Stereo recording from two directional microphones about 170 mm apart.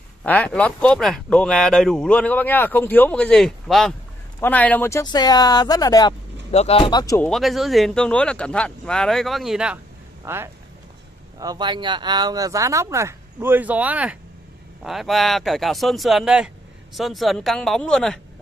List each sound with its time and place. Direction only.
0.2 s speech: 5° left (ahead or behind); by 6.1 s 25° left (ahead or behind)
6.5 s speech: 35° left (ahead or behind)
7.2 s speech: centre (ahead or behind)
10.2 s speech: 15° right (ahead or behind); by 18.2 s 5° left (ahead or behind)